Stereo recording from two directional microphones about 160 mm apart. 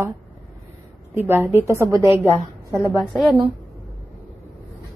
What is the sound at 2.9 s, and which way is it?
Speech, centre (ahead or behind).